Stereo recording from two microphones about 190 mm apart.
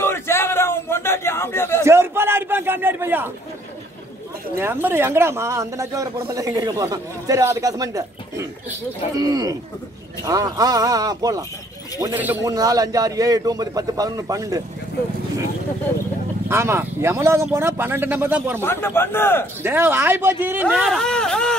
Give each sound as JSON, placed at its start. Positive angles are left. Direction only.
{"t": 0.0, "sound": "a sound", "side_deg": 15}
{"t": 1.9, "sound": "a sound", "side_deg": -10}
{"t": 4.6, "sound": "a man's voice", "side_deg": -10}
{"t": 16.4, "sound": "speech", "side_deg": -15}
{"t": 18.6, "sound": "a man's voice", "side_deg": 10}
{"t": 19.6, "sound": "speech", "side_deg": -10}
{"t": 20.6, "sound": "speech", "side_deg": 0}